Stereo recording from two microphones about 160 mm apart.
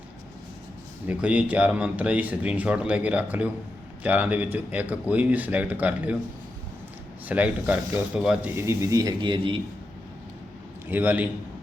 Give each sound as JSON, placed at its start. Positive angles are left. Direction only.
{"t": 1.0, "sound": "speech", "side_deg": -10}
{"t": 7.3, "sound": "speech", "side_deg": -10}
{"t": 10.8, "sound": "speech", "side_deg": -10}